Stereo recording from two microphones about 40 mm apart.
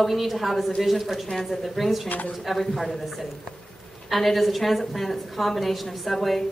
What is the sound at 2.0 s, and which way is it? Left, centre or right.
Speech, left.